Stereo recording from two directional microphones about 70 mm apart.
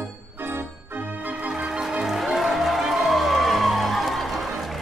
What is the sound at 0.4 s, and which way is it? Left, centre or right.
Music, right.